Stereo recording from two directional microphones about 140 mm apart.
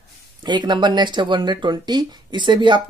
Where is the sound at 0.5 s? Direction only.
30° right (ahead or behind).